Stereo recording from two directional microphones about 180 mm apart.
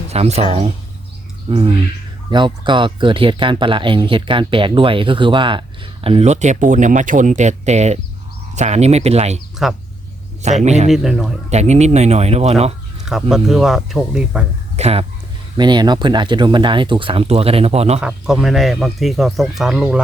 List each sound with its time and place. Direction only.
0.1 s speech: 35° right (ahead or behind)
1.5 s speech: 30° right (ahead or behind)
9.6 s speech: 5° right (ahead or behind)
10.4 s speech: 40° right (ahead or behind)
10.9 s speech: centre (ahead or behind)
11.4 s speech: 40° right (ahead or behind)
13.1 s speech: centre (ahead or behind)
14.8 s speech: 35° right (ahead or behind)
15.5 s speech: 25° right (ahead or behind)
18.0 s speech: centre (ahead or behind)